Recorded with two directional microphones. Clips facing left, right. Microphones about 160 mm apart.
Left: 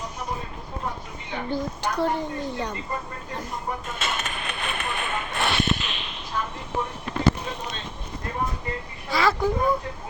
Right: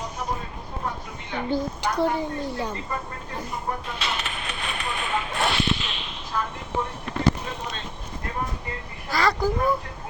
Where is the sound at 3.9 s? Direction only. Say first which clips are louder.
Even; 45° left (ahead or behind).